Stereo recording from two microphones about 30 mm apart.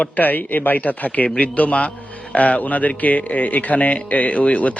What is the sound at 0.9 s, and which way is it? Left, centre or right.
Speech, left.